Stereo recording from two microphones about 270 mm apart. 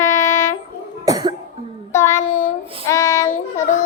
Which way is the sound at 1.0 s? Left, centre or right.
Centre.